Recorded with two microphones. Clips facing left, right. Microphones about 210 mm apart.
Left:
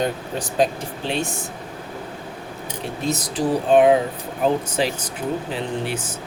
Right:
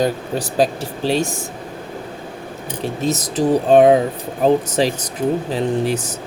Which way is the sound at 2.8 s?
40° right (ahead or behind).